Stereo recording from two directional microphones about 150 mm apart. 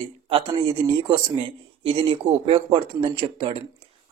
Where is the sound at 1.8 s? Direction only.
35° right (ahead or behind).